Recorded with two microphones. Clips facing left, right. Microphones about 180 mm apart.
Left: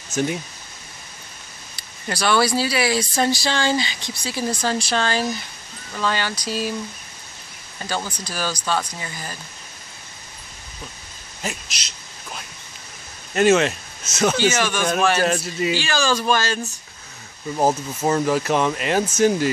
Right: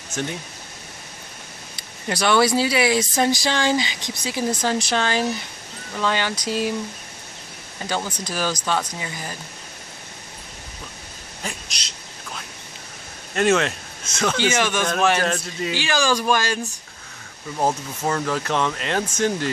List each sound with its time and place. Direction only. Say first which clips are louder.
0.1 s speech: left 5 dB; 10° left (ahead or behind)
1.8 s speech: right 1 dB; 20° right (ahead or behind)
8.2 s speech: right 2 dB; 20° right (ahead or behind)
11.4 s speech: left 3 dB; 5° left (ahead or behind)
13.3 s speech: left 3 dB; 5° left (ahead or behind)
14.4 s speech: left 1 dB; 20° right (ahead or behind)
14.8 s speech: left 3 dB; 10° left (ahead or behind)
15.8 s speech: even; 15° right (ahead or behind)
18.0 s speech: left 4 dB; 15° left (ahead or behind)